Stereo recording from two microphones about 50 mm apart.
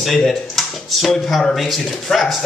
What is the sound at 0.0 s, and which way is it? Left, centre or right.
Speech, centre.